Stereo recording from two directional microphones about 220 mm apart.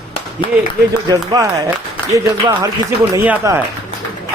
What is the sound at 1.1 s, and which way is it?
Speech, 15° right (ahead or behind).